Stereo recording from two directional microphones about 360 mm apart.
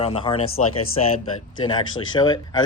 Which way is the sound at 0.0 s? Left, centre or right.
Centre.